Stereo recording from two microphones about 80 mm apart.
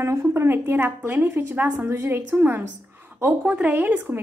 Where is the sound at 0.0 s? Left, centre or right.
Right.